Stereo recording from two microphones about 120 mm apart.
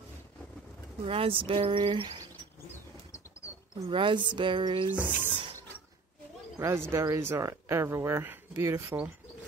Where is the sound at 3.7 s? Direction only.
45° right (ahead or behind).